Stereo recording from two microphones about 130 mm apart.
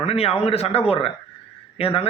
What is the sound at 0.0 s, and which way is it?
Speech, 50° left (ahead or behind).